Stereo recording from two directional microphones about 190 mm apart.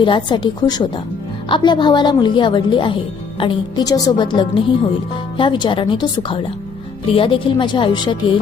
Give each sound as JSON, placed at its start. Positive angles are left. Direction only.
{"t": 0.0, "sound": "a woman's voice", "side_deg": 25}